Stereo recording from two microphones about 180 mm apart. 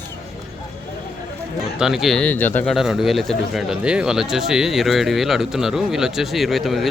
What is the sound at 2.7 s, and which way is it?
Speech, centre (ahead or behind).